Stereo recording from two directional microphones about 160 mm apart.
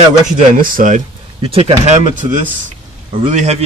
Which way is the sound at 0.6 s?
55° right (ahead or behind).